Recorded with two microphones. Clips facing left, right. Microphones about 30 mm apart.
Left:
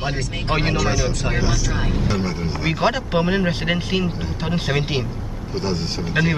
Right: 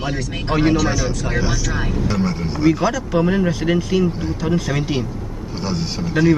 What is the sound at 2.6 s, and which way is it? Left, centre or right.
Speech, left.